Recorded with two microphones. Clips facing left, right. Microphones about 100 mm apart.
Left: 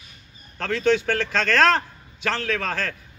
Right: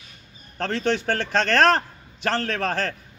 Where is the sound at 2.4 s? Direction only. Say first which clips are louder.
Right 2 dB; 50° right (ahead or behind).